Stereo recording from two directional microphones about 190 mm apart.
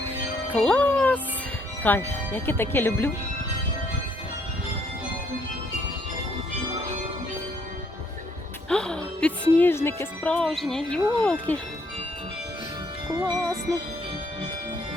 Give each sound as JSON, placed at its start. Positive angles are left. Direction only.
{"t": 0.5, "sound": "music", "side_deg": 5}
{"t": 1.8, "sound": "speech", "side_deg": 10}
{"t": 8.7, "sound": "speech", "side_deg": 5}
{"t": 13.1, "sound": "music", "side_deg": -15}